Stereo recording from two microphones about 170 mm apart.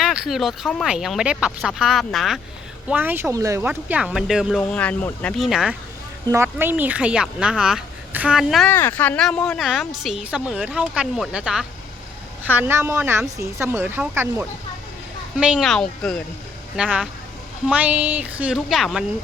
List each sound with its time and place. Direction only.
0.0 s a woman's voice: 5° right (ahead or behind)
2.9 s speech: 10° right (ahead or behind); by 5.3 s 10° left (ahead or behind)
5.4 s a woman's voice: 5° right (ahead or behind)
6.3 s speech: 15° right (ahead or behind)
8.7 s a woman's voice: 10° left (ahead or behind)